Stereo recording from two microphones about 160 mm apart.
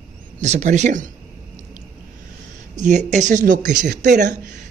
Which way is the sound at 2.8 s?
50° right (ahead or behind).